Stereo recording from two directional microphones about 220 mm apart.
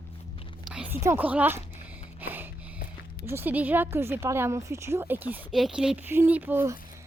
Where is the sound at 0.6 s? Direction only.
5° right (ahead or behind).